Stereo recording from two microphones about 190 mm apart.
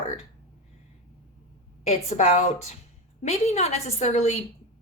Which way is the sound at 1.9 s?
35° left (ahead or behind).